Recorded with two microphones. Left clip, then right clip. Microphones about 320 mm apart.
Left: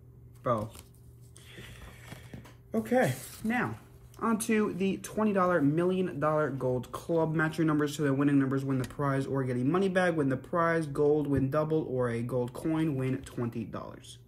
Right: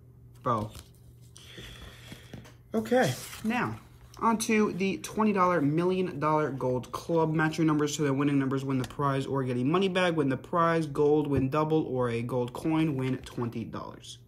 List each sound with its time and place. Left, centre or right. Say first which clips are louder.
0.4 s speech: right 1 dB; centre
2.7 s speech: right 2 dB; centre